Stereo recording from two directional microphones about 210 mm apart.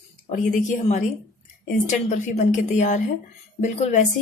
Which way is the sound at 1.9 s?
35° left (ahead or behind).